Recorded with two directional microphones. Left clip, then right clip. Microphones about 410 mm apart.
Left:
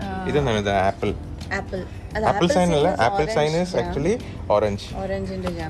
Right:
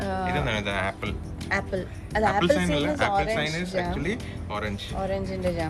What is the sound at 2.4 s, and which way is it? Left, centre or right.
Speech, centre.